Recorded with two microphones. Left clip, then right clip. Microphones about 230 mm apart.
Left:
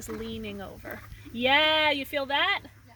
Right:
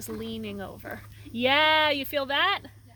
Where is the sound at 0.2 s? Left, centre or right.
Right.